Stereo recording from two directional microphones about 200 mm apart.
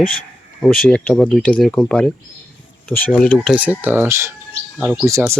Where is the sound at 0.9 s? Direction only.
5° left (ahead or behind).